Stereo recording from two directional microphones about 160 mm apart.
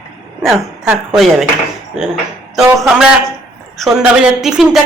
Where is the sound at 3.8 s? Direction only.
5° right (ahead or behind).